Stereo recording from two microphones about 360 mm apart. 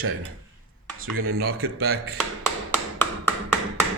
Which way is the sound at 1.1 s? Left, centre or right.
Right.